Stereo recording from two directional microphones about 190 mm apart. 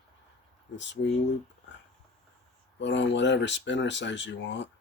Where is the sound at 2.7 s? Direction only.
70° left (ahead or behind).